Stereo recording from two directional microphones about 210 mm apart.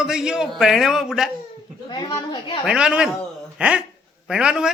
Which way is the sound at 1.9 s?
20° left (ahead or behind).